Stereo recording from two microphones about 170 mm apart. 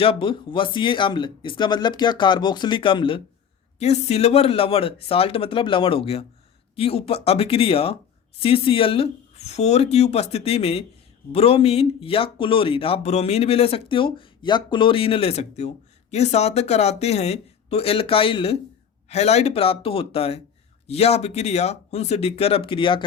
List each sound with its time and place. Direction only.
0.0 s speech: 30° left (ahead or behind)